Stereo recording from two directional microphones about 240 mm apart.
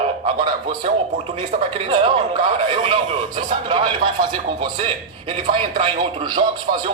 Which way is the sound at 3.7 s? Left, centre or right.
Right.